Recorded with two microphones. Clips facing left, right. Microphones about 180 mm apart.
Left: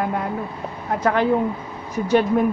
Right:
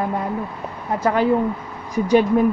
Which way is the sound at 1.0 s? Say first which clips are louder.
Right 1 dB; 5° right (ahead or behind).